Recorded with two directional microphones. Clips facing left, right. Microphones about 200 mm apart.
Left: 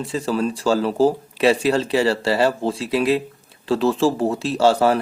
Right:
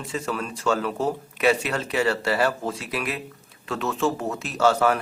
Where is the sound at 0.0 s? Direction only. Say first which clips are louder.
Left 7 dB; 35° left (ahead or behind).